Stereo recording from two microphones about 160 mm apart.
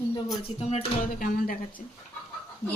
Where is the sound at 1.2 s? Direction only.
60° left (ahead or behind).